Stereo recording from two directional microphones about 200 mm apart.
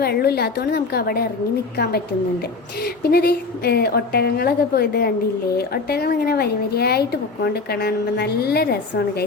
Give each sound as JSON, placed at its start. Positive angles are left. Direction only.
{"t": 0.0, "sound": "a woman's voice", "side_deg": 50}